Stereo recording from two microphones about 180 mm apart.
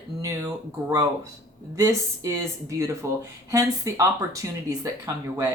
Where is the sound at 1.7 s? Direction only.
15° right (ahead or behind).